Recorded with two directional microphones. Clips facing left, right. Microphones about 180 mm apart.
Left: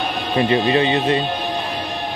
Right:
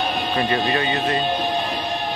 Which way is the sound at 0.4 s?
20° left (ahead or behind).